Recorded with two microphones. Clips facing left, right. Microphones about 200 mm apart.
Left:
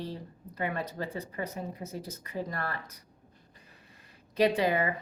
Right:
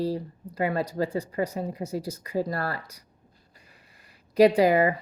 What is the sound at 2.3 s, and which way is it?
Speech, 35° right (ahead or behind).